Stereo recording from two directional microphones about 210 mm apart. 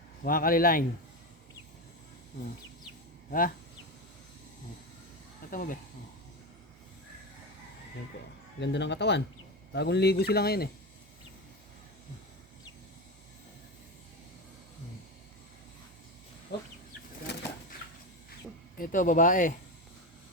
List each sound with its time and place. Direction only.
0.3 s speech: 40° left (ahead or behind)
2.8 s a sound: 40° left (ahead or behind)
5.5 s speech: 40° left (ahead or behind)
8.6 s speech: 60° left (ahead or behind)
16.5 s speech: 55° left (ahead or behind)
17.3 s bird: 55° left (ahead or behind)
18.8 s speech: 40° left (ahead or behind)